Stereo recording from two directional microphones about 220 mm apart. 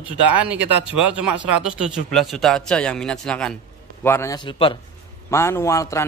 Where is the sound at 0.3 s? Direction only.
5° right (ahead or behind); by 4.7 s 20° left (ahead or behind).